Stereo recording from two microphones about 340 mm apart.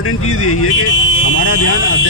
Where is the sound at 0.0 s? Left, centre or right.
Left.